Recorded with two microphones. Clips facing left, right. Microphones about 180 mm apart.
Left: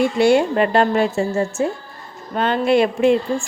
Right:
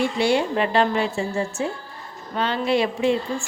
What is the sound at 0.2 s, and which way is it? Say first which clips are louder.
A woman's voice: left 7 dB; 50° left (ahead or behind).